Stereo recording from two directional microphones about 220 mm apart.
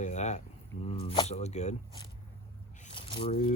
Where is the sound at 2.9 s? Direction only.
25° left (ahead or behind).